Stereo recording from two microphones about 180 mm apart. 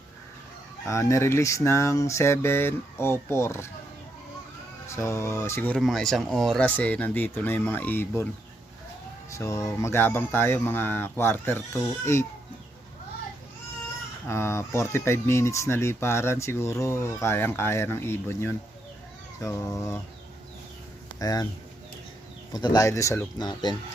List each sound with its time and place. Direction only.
0.9 s speech: 15° left (ahead or behind)
4.9 s speech: 15° left (ahead or behind)
9.3 s speech: 15° left (ahead or behind)
14.3 s speech: 15° left (ahead or behind)
21.2 s speech: 20° left (ahead or behind)
22.5 s speech: 25° left (ahead or behind)